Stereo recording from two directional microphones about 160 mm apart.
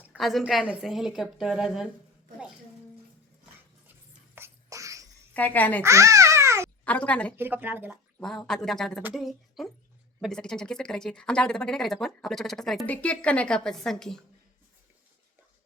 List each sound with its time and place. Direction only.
0.0 s speech: 5° right (ahead or behind)
4.4 s a sound: 15° right (ahead or behind)
5.3 s a woman's voice: 10° left (ahead or behind)
5.8 s babbling: 20° right (ahead or behind)
6.8 s a woman's voice: 10° left (ahead or behind)
7.3 s a woman's voice: 15° right (ahead or behind)
8.2 s speech: 5° left (ahead or behind)